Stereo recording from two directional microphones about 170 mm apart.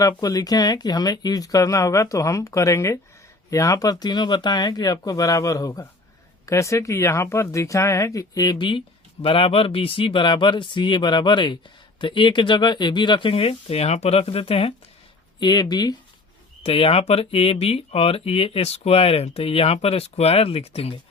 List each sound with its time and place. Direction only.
0.0 s speech: 20° left (ahead or behind)
16.6 s speech: 35° left (ahead or behind)